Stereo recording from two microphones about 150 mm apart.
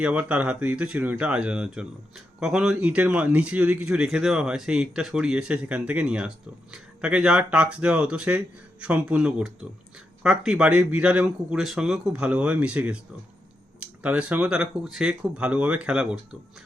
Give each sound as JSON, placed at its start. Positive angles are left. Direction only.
{"t": 0.0, "sound": "a man's voice", "side_deg": -10}